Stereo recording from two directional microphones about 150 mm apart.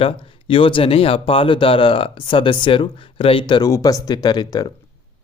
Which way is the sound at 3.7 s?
20° left (ahead or behind).